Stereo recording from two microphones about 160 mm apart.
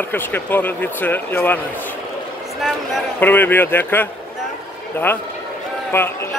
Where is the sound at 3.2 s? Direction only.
10° left (ahead or behind).